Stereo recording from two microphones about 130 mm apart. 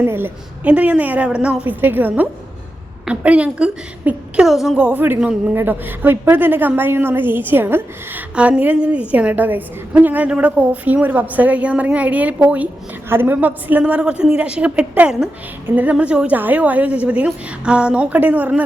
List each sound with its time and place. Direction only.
0.0 s a woman's voice: 15° right (ahead or behind)